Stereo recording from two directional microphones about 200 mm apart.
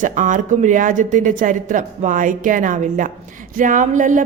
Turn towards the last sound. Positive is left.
turn(degrees=-40)  # may be behind; listen again after turning